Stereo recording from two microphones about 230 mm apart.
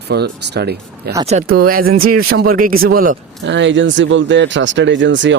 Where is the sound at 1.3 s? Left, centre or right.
Right.